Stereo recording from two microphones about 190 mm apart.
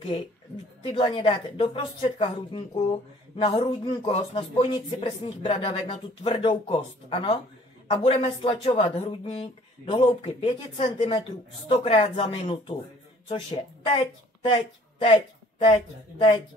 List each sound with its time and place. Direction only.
0.8 s a woman's voice: 25° left (ahead or behind)